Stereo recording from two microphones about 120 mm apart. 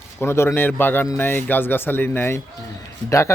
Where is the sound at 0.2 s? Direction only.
20° left (ahead or behind).